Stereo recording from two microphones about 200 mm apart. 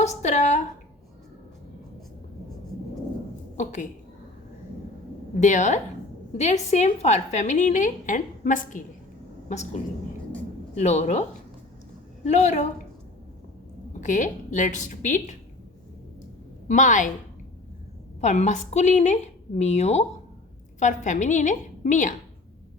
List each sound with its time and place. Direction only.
0.0 s a sound: 35° left (ahead or behind)
3.6 s a woman's voice: 40° left (ahead or behind)
5.4 s a woman's voice: 40° left (ahead or behind)
14.0 s a woman's voice: 40° left (ahead or behind)
16.6 s a woman's voice: 40° left (ahead or behind)
18.2 s a woman's voice: 35° left (ahead or behind)